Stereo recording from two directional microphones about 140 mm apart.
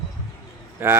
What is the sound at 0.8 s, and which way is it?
Speech, 15° right (ahead or behind).